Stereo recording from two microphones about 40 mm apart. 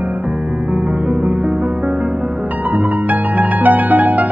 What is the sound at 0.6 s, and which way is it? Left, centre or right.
Music, right.